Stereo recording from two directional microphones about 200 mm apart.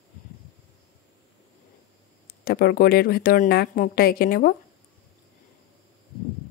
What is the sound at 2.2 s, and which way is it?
A woman's voice, 50° left (ahead or behind).